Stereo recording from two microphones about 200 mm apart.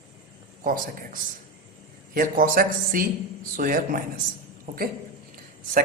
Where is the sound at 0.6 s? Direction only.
45° right (ahead or behind).